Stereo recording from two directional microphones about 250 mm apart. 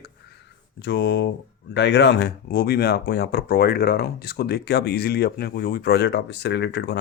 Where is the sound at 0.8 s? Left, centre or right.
Left.